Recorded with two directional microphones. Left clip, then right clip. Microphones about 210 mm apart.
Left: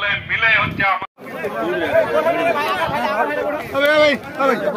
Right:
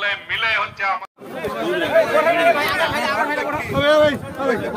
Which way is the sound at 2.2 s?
50° left (ahead or behind).